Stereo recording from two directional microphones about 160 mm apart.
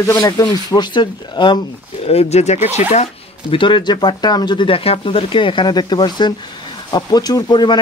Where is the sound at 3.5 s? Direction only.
30° left (ahead or behind).